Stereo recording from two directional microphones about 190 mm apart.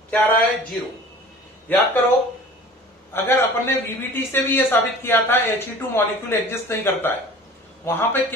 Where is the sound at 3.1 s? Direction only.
10° left (ahead or behind).